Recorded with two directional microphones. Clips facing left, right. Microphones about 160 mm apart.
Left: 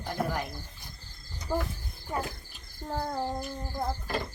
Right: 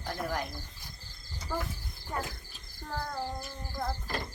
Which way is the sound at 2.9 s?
25° left (ahead or behind).